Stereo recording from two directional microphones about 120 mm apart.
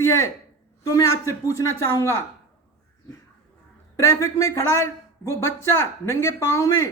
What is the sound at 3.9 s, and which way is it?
Speech, 25° left (ahead or behind).